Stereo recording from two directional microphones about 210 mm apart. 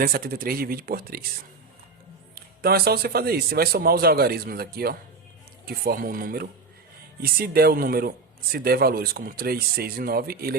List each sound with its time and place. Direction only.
0.0 s speech: 45° right (ahead or behind)